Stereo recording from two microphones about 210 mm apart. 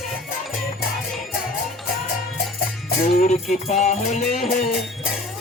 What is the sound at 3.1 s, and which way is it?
Music, 35° left (ahead or behind).